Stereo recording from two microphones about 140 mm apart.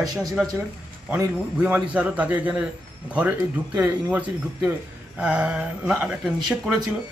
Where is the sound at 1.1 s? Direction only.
10° right (ahead or behind).